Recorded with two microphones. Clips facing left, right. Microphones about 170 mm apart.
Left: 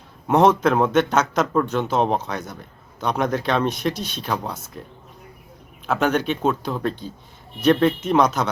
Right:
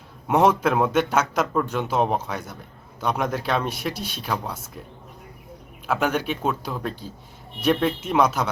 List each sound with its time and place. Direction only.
0.3 s a man's voice: 10° right (ahead or behind)
5.8 s a man's voice: 5° right (ahead or behind)